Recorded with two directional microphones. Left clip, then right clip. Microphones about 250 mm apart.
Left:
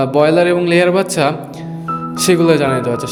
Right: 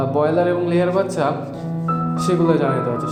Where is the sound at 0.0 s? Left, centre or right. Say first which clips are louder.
Left 6 dB; left.